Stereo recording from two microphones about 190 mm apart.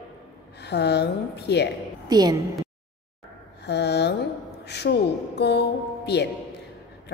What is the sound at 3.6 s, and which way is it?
A woman's voice, 60° left (ahead or behind).